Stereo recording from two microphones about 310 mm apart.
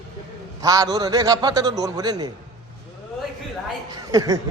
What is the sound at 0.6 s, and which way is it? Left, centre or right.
A man's voice, centre.